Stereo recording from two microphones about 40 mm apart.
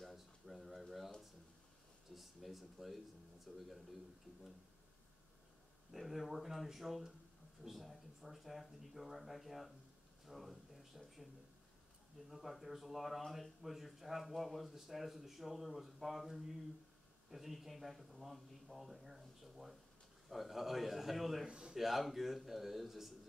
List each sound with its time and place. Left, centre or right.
0.0 s a sound: centre
2.1 s speech: centre
5.9 s speech: centre
10.2 s a sound: centre
12.3 s speech: centre
21.5 s speech: right
21.7 s speech: centre